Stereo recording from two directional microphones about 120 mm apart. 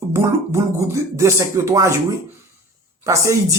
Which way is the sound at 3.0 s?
25° right (ahead or behind).